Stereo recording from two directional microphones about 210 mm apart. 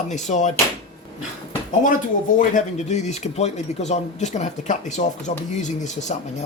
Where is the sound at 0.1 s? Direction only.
35° left (ahead or behind).